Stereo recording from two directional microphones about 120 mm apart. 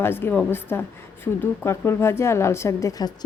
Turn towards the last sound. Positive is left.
turn(degrees=30)  # may be behind; listen again after turning